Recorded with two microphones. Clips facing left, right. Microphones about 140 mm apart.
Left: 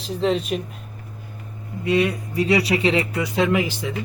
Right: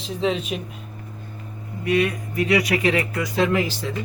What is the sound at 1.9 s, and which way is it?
Speech, 30° left (ahead or behind).